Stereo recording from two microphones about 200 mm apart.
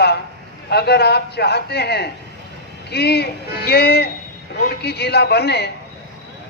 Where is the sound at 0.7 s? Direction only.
55° left (ahead or behind).